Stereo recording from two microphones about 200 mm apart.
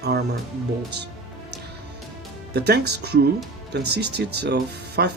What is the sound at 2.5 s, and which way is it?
Speech, 55° right (ahead or behind).